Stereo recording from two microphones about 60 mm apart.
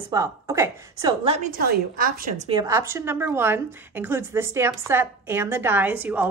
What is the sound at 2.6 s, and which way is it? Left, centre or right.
A woman's voice, right.